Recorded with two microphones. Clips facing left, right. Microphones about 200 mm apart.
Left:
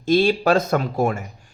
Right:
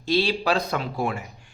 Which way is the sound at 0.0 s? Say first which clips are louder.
Left 6 dB; 50° left (ahead or behind).